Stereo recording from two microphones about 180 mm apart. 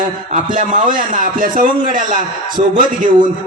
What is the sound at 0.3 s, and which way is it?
Speech, 45° right (ahead or behind).